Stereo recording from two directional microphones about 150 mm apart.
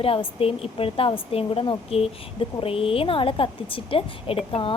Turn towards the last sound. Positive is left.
turn(degrees=35)  # may be behind; listen again after turning